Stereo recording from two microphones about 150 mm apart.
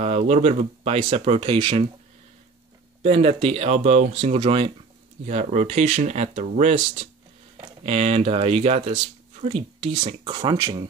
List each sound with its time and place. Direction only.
0.0 s speech: 45° right (ahead or behind)
3.0 s speech: 40° right (ahead or behind)
5.2 s speech: 50° right (ahead or behind); by 10.8 s 30° right (ahead or behind)